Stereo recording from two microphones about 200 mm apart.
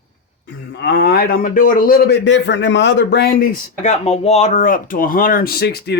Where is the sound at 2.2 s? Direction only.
65° left (ahead or behind).